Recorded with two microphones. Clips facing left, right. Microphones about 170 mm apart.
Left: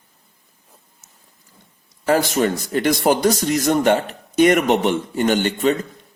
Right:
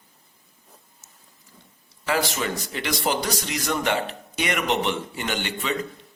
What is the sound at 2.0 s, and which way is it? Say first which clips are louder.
A man's voice: left 8 dB; 45° left (ahead or behind).